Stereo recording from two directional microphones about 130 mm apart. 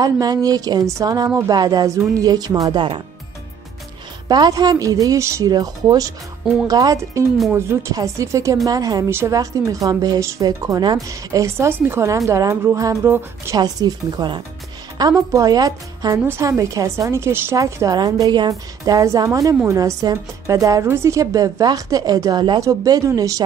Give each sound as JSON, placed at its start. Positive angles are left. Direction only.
{"t": 0.0, "sound": "a woman's voice", "side_deg": -30}
{"t": 4.3, "sound": "a woman's voice", "side_deg": -30}
{"t": 13.6, "sound": "a woman's voice", "side_deg": -30}